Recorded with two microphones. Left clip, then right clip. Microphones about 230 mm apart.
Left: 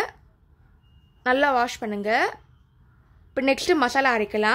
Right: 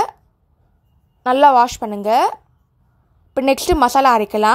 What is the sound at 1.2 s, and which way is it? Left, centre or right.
A woman's voice, right.